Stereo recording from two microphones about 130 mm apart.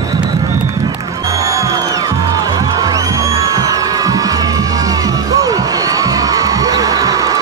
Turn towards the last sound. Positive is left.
turn(degrees=-25)  # may be behind; listen again after turning